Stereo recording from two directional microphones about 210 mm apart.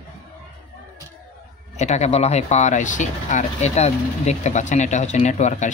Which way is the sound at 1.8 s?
30° left (ahead or behind).